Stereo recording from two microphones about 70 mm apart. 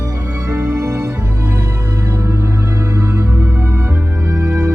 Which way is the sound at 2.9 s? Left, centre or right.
Right.